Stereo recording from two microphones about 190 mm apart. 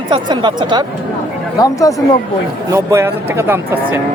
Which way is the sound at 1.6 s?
15° left (ahead or behind).